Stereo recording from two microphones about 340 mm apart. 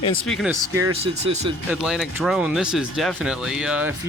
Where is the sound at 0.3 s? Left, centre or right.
Centre.